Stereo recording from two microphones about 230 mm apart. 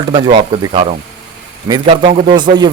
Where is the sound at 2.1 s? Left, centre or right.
Right.